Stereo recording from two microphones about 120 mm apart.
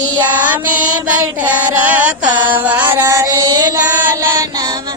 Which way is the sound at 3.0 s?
25° right (ahead or behind).